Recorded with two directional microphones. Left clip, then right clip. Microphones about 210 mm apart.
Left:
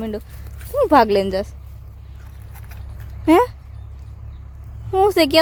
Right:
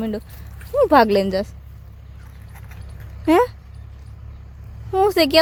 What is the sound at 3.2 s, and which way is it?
Speech, centre (ahead or behind).